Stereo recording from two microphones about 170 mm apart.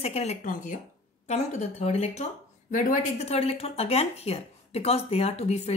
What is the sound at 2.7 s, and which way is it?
Speech, 50° left (ahead or behind).